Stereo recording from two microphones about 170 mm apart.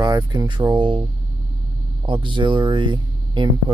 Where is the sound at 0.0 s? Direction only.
20° right (ahead or behind).